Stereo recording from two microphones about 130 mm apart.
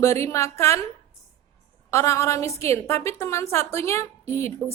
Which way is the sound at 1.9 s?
20° left (ahead or behind).